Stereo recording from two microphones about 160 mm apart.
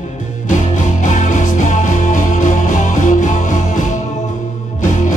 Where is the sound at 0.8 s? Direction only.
50° left (ahead or behind).